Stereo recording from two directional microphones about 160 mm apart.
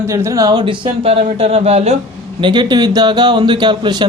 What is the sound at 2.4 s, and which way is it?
Speech, 30° right (ahead or behind).